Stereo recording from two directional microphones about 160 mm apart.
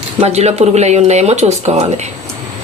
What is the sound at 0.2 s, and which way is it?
Speech, 40° right (ahead or behind).